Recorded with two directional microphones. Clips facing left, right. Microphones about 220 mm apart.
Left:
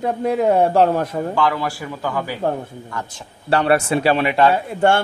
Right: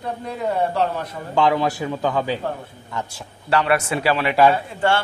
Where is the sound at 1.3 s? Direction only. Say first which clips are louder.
Right 7 dB; 20° right (ahead or behind).